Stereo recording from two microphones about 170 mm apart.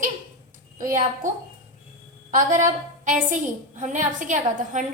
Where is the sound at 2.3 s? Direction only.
50° right (ahead or behind).